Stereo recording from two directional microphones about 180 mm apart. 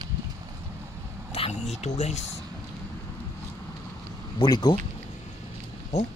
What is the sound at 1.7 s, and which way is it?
Speech, 35° left (ahead or behind).